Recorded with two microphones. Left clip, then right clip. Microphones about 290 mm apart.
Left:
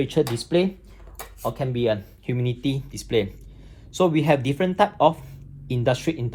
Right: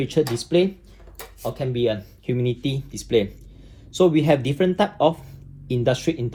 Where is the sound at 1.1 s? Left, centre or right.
Centre.